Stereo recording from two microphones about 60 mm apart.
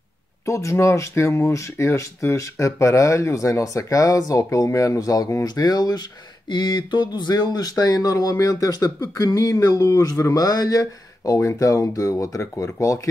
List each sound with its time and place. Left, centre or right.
0.5 s speech: left
7.5 s speech: left
9.1 s speech: left
11.3 s speech: left